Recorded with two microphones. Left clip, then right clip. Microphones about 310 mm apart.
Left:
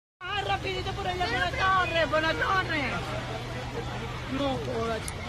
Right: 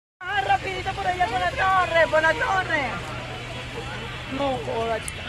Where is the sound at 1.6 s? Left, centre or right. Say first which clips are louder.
Right 6 dB; right.